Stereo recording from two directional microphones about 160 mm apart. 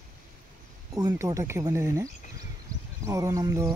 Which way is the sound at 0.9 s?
20° right (ahead or behind).